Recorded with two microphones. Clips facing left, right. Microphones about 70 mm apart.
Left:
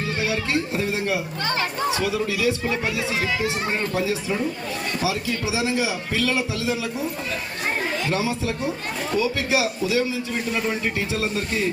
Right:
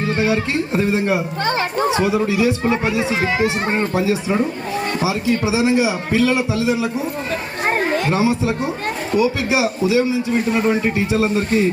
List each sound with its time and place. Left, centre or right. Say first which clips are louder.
0.2 s a man's voice: right 4 dB; right
8.1 s a man's voice: right 7 dB; right
10.8 s a man's voice: right 7 dB; right